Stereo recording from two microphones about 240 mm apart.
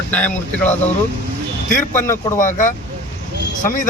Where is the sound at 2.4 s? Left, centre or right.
Left.